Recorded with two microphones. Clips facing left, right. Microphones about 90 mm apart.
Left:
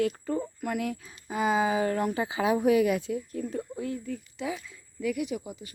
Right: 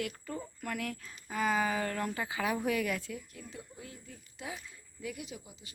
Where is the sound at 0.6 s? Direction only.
15° left (ahead or behind).